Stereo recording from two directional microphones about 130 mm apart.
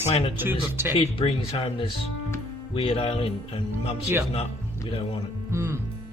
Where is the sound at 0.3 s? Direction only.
15° right (ahead or behind).